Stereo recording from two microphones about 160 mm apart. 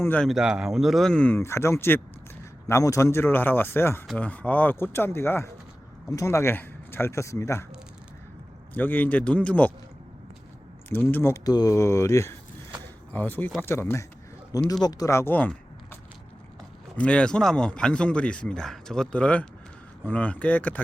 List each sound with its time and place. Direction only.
0.0 s a man's voice: 10° left (ahead or behind)
0.3 s a man's voice: 5° right (ahead or behind); by 7.6 s 15° left (ahead or behind)
8.7 s a man's voice: 10° left (ahead or behind)
10.8 s a man's voice: 15° left (ahead or behind)
17.0 s a man's voice: 5° left (ahead or behind)